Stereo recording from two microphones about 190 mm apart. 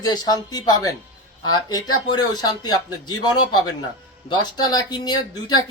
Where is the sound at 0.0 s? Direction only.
20° left (ahead or behind).